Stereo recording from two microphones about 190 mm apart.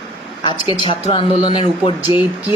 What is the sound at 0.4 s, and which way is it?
Speech, 25° left (ahead or behind).